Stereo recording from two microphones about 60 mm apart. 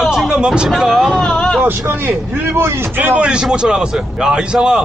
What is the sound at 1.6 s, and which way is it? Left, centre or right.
Speech, right.